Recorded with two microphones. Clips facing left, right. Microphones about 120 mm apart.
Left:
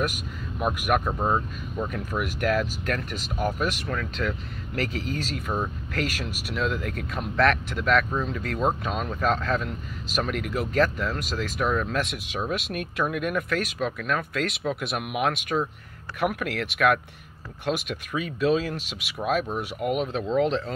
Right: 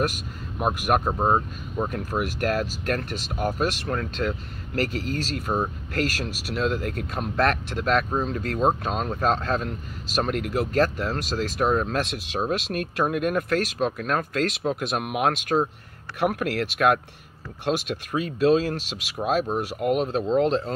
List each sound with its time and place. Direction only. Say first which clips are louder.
0.6 s speech: right 2 dB; 25° right (ahead or behind)